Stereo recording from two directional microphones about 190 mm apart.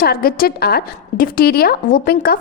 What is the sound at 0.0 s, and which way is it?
A woman's voice, 55° left (ahead or behind).